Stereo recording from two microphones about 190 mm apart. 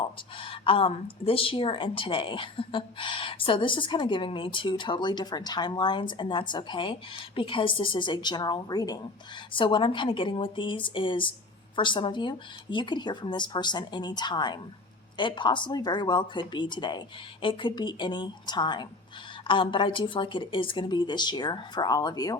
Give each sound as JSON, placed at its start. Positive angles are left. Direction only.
{"t": 0.0, "sound": "a woman's voice", "side_deg": 25}